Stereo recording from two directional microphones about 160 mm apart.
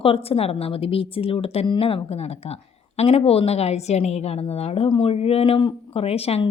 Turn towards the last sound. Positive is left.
turn(degrees=40)  # may be behind; listen again after turning